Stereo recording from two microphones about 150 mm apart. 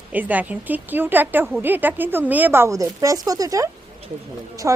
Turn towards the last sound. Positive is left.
turn(degrees=-20)  # may be behind; listen again after turning